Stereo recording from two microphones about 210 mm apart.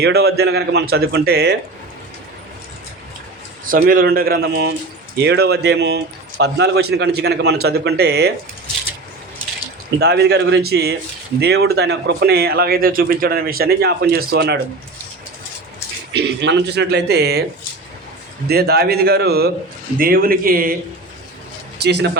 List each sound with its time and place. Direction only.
0.0 s a man's voice: 50° right (ahead or behind)
3.7 s a man's voice: 45° right (ahead or behind)
10.0 s a man's voice: 50° right (ahead or behind)
16.1 s a man's voice: 55° right (ahead or behind)
18.4 s a man's voice: 50° right (ahead or behind)
21.8 s a man's voice: 55° right (ahead or behind)